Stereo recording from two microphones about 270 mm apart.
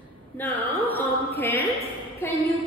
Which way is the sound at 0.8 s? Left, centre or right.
Centre.